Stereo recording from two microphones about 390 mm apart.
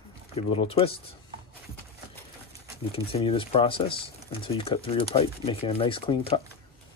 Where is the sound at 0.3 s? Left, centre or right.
Centre.